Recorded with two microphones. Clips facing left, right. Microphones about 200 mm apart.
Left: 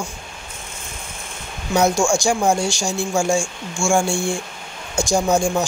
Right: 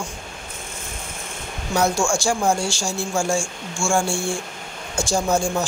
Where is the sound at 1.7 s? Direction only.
20° left (ahead or behind).